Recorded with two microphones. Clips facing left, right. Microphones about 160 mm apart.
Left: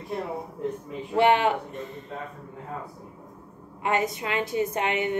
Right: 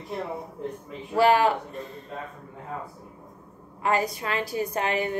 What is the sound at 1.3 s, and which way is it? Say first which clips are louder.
Speech: right 1 dB; 20° left (ahead or behind).